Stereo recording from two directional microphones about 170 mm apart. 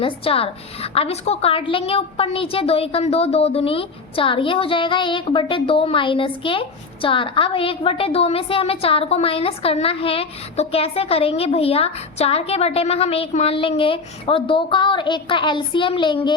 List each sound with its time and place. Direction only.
0.0 s a woman's voice: 35° left (ahead or behind)